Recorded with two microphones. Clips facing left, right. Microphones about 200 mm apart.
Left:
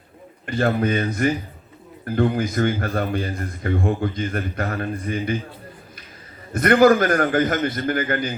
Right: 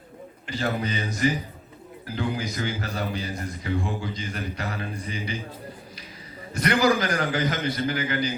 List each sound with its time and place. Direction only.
0.4 s a man's voice: 55° left (ahead or behind)
6.5 s a man's voice: 55° left (ahead or behind)